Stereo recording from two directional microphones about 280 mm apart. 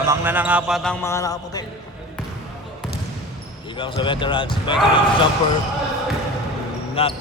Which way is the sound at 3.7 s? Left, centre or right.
Centre.